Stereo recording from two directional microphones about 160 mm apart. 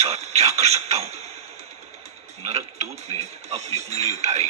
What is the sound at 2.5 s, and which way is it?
Speech, 40° right (ahead or behind).